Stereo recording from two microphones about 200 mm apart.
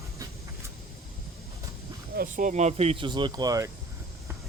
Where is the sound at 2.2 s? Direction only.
45° right (ahead or behind); by 3.7 s 15° right (ahead or behind).